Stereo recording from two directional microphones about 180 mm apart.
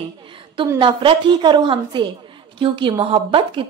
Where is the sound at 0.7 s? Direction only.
25° right (ahead or behind).